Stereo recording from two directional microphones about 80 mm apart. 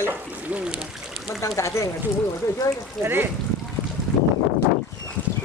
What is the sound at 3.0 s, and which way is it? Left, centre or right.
Speech, right.